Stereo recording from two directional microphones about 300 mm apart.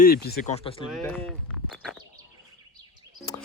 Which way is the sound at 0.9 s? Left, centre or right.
Centre.